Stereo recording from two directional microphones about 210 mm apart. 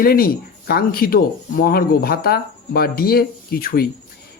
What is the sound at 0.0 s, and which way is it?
Speech, 45° left (ahead or behind).